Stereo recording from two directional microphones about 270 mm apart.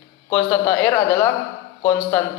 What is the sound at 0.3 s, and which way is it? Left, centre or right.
A man's voice, centre.